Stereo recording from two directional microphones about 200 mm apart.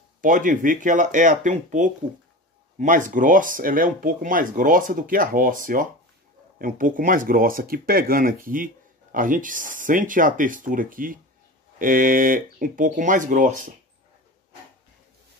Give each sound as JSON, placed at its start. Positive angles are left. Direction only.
{"t": 0.2, "sound": "speech", "side_deg": -40}